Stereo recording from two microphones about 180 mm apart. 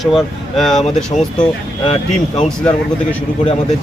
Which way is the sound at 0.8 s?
40° left (ahead or behind).